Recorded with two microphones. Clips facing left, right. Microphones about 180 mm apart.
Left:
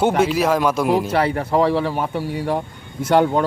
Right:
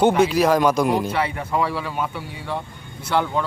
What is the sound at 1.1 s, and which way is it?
Speech, 40° left (ahead or behind).